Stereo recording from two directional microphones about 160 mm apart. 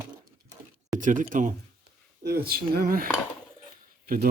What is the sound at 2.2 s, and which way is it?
Dishes, 75° right (ahead or behind).